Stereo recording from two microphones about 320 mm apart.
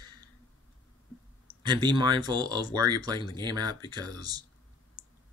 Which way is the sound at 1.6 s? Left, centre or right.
Centre.